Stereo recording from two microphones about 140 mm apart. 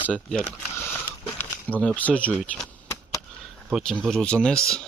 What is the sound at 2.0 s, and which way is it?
Speech, 10° left (ahead or behind).